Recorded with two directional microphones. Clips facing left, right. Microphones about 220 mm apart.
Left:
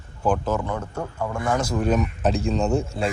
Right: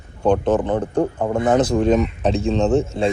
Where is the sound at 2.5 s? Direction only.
35° right (ahead or behind).